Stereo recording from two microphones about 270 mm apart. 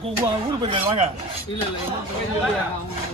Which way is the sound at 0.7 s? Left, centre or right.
Centre.